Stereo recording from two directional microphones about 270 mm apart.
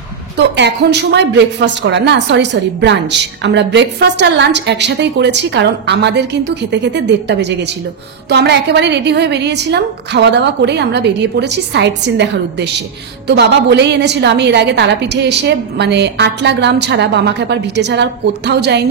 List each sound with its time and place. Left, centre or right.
0.4 s speech: right